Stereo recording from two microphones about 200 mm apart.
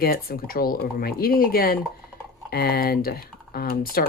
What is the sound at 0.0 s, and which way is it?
Speech, 50° left (ahead or behind).